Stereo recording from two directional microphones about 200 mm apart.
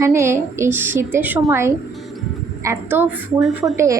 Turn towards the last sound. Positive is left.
turn(degrees=-15)  # may be behind; listen again after turning